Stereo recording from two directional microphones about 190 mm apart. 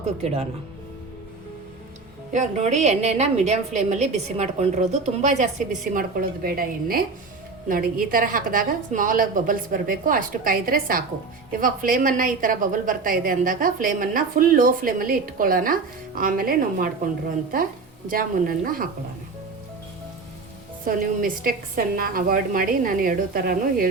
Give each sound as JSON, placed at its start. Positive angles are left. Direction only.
{"t": 0.2, "sound": "a woman's voice", "side_deg": -30}
{"t": 2.3, "sound": "a woman's voice", "side_deg": -40}
{"t": 20.8, "sound": "a woman's voice", "side_deg": -45}